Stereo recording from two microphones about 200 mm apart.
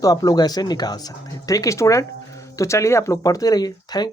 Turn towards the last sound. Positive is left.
turn(degrees=20)  # may be behind; listen again after turning